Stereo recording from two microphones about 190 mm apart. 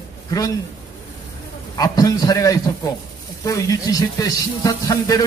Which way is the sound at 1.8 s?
20° left (ahead or behind).